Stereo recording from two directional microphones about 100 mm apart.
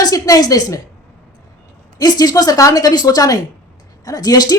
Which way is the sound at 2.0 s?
40° left (ahead or behind).